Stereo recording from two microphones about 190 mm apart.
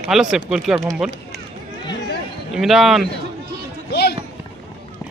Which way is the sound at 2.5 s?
Centre (ahead or behind).